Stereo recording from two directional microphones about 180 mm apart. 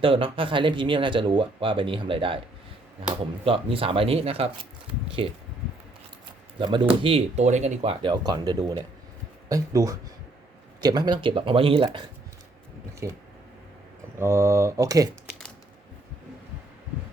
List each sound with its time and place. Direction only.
0.0 s speech: 30° right (ahead or behind)
3.4 s speech: 30° right (ahead or behind)
6.6 s speech: 25° right (ahead or behind)
13.0 s speech: 15° right (ahead or behind)
14.2 s speech: 15° right (ahead or behind)
15.3 s a sound: 5° left (ahead or behind)